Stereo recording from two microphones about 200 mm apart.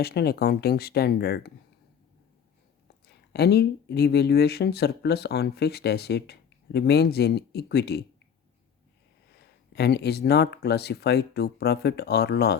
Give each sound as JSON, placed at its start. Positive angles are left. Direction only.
{"t": 0.0, "sound": "speech", "side_deg": 50}
{"t": 3.3, "sound": "speech", "side_deg": 55}
{"t": 9.7, "sound": "speech", "side_deg": 55}